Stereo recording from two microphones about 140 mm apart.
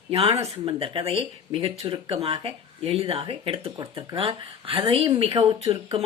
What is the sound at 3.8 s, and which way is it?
Speech, 30° right (ahead or behind).